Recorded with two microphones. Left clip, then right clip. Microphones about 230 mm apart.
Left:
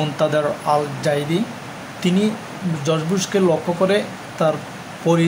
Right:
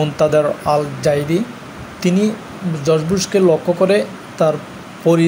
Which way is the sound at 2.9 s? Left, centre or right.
Centre.